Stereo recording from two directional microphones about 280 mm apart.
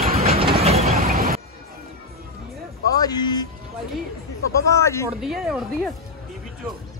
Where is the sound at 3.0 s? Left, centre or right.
Centre.